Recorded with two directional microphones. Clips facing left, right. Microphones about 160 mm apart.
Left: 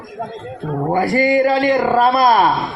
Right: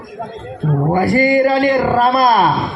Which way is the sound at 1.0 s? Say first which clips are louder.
Right 1 dB; 40° right (ahead or behind).